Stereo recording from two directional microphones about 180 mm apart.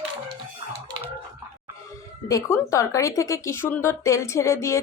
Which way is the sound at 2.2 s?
20° left (ahead or behind).